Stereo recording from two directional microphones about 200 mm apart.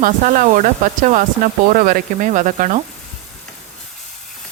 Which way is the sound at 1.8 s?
45° right (ahead or behind).